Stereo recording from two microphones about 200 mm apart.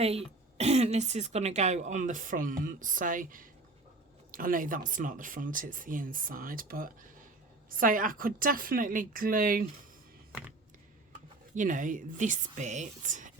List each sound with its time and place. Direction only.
0.0 s speech: 30° right (ahead or behind)
11.5 s speech: 40° right (ahead or behind)